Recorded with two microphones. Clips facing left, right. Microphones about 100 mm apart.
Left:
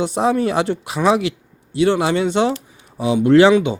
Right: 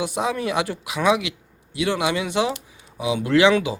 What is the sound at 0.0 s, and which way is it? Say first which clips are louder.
Speech: left 7 dB; 30° left (ahead or behind).